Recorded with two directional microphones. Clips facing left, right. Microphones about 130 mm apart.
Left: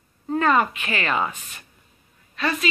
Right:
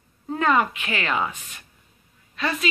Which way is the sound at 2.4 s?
10° right (ahead or behind).